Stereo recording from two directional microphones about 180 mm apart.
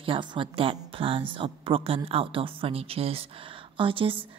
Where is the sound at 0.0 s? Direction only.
25° right (ahead or behind).